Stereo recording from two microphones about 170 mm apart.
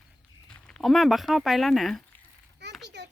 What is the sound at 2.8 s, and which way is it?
Children playing, 85° right.